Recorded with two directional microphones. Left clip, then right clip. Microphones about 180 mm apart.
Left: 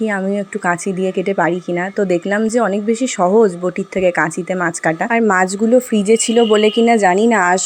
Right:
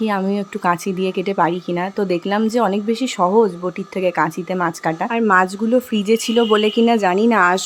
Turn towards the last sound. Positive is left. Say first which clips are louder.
# left 2 dB
turn(degrees=5)  # may be behind; listen again after turning